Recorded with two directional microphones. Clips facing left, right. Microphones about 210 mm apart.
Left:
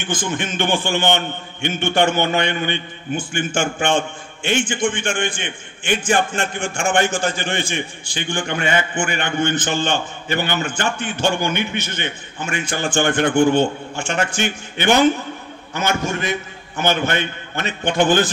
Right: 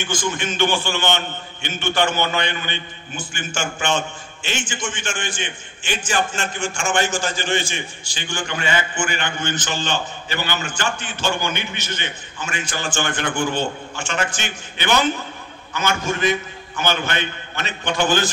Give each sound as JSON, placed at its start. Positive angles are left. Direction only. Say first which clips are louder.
{"t": 0.0, "sound": "a man's voice", "louder": "left 1 dB", "side_deg": 55}
{"t": 16.7, "sound": "a man's voice", "louder": "left 4 dB", "side_deg": 50}